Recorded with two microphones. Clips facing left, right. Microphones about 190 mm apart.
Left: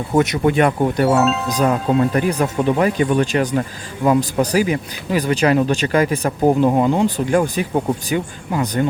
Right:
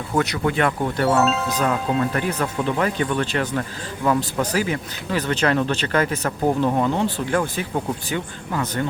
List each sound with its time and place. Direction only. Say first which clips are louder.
0.1 s speech: left 6 dB; 20° left (ahead or behind)
1.1 s speech: left 3 dB; centre (ahead or behind)
1.5 s speech: left 4 dB; 15° left (ahead or behind)
1.7 s speech: left 5 dB; 25° left (ahead or behind)
2.6 s speech: left 6 dB; 15° left (ahead or behind)